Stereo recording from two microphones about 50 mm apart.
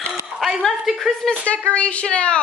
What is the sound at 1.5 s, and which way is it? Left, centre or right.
Speech, left.